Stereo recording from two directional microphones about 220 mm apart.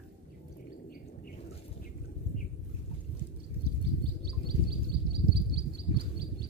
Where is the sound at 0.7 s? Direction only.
40° left (ahead or behind).